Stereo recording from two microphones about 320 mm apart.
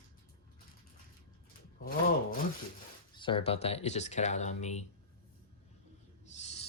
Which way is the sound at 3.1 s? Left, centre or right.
Centre.